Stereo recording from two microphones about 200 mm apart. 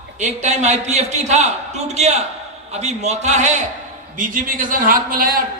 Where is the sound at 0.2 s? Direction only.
35° right (ahead or behind).